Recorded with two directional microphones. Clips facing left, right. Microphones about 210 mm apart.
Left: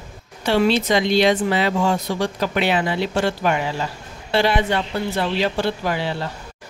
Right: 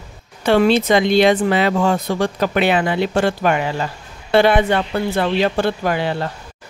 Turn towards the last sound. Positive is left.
turn(degrees=-55)  # may be behind; listen again after turning